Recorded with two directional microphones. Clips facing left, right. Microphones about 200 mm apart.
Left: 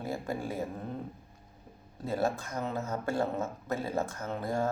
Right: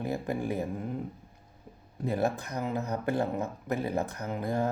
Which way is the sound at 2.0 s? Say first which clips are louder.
Right 2 dB; 15° right (ahead or behind).